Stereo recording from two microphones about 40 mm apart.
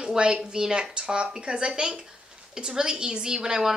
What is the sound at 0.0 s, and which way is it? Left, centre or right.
A woman's voice, centre.